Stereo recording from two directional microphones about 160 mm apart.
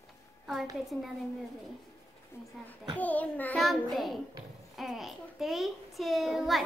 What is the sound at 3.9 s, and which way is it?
A child's voice, centre (ahead or behind).